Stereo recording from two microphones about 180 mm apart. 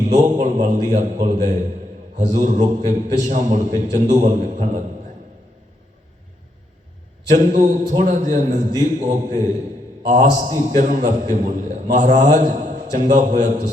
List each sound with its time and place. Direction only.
0.0 s a man's voice: 45° right (ahead or behind)
7.3 s a man's voice: 45° right (ahead or behind)